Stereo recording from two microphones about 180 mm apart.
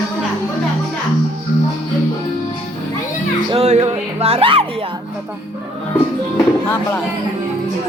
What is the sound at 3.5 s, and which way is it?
Speech, 35° right (ahead or behind).